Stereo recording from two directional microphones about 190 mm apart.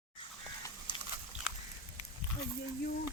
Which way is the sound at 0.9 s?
25° left (ahead or behind).